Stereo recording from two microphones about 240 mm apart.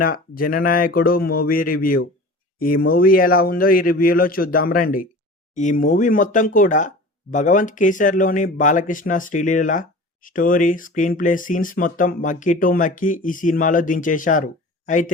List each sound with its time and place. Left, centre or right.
0.0 s speech: left